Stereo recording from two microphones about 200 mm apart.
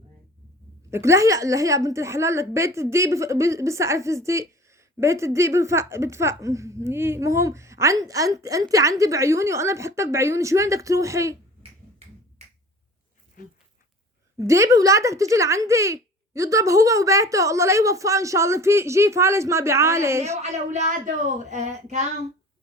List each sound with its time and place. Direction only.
0.9 s a woman's voice: 15° right (ahead or behind)
14.3 s a woman's voice: 15° right (ahead or behind)
20.3 s a woman's voice: 35° right (ahead or behind)